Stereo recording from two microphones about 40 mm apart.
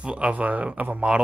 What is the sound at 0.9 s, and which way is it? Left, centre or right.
Speech, right.